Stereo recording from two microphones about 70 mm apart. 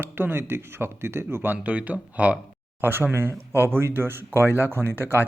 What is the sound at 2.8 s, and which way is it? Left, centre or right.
Speech, right.